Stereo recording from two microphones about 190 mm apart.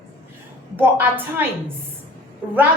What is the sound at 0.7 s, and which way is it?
Speech, 10° right (ahead or behind).